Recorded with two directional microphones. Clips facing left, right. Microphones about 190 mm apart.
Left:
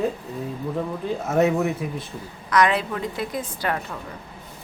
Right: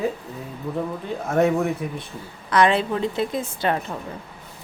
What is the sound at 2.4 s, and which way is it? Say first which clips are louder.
A woman's voice: right 2 dB; 30° right (ahead or behind).